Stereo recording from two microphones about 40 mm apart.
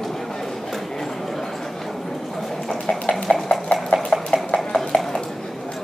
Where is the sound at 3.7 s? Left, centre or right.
Left.